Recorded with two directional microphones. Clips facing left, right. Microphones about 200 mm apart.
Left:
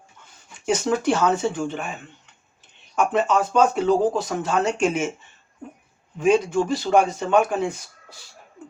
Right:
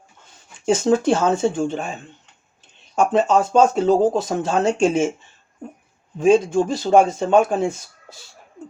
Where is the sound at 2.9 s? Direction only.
30° right (ahead or behind).